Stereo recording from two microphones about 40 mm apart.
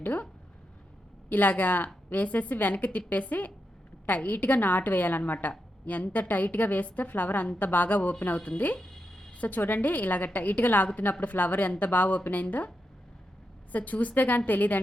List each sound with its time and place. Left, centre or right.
0.0 s speech: left
1.3 s a woman's voice: left
13.7 s a woman's voice: left